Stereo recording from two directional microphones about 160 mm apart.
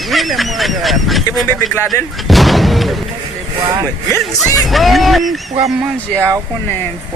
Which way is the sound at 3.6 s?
25° right (ahead or behind).